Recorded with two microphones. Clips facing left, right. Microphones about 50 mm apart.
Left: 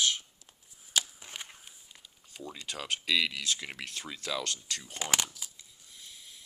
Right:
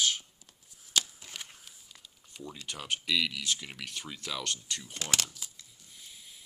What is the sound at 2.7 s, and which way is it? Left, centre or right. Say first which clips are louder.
Speech: left 1 dB; left.